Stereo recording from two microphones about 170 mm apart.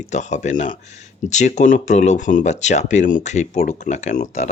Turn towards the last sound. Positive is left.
turn(degrees=45)  # may be behind; listen again after turning